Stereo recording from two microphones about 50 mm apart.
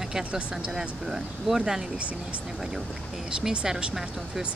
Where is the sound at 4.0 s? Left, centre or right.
Centre.